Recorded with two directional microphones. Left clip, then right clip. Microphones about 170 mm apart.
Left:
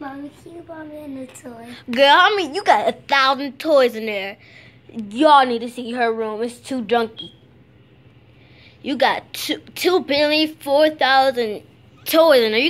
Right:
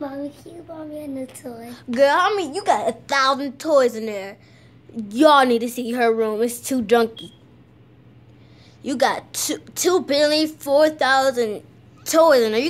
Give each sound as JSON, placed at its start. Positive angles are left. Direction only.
{"t": 1.4, "sound": "a woman's voice", "side_deg": -15}
{"t": 2.0, "sound": "a woman's voice", "side_deg": 10}
{"t": 5.0, "sound": "a woman's voice", "side_deg": -25}
{"t": 8.8, "sound": "a woman's voice", "side_deg": 5}